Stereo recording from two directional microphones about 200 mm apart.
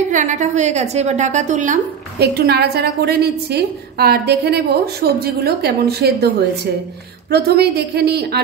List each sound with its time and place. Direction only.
0.1 s a woman's voice: 40° right (ahead or behind)
2.1 s a woman's voice: 55° right (ahead or behind)